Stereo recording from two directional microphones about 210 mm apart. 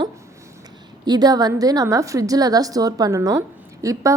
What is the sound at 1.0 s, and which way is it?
A woman's voice, 20° right (ahead or behind).